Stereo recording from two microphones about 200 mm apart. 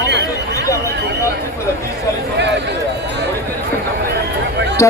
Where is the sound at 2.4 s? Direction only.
60° right (ahead or behind).